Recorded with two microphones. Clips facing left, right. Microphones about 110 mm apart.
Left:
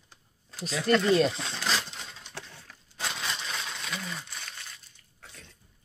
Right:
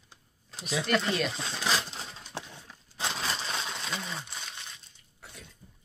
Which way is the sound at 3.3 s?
30° right (ahead or behind).